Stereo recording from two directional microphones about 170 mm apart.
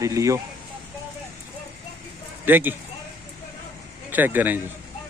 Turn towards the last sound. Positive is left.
turn(degrees=-10)  # may be behind; listen again after turning